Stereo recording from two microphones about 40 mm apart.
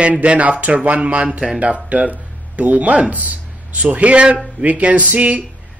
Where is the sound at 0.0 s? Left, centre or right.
Right.